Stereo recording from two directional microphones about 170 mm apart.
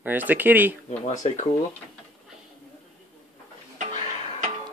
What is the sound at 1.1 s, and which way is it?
Speech, 45° left (ahead or behind).